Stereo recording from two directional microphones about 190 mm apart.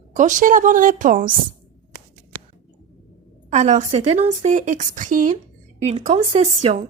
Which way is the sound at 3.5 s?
40° right (ahead or behind).